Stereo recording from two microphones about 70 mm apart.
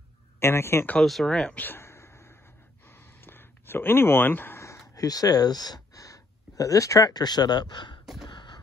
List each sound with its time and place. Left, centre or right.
0.4 s speech: left
0.9 s speech: centre
1.6 s a sound: left
4.6 s speech: left